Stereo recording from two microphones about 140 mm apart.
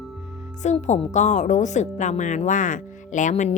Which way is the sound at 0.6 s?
55° left (ahead or behind).